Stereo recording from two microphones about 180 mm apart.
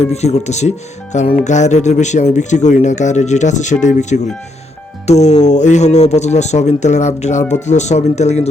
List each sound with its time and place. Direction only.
0.0 s speech: 35° left (ahead or behind)